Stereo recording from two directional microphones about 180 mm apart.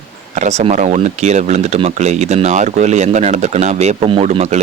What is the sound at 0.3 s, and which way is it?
Speech, 40° right (ahead or behind).